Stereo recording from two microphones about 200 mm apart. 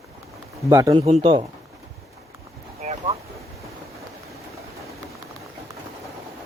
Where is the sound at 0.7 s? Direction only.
20° right (ahead or behind).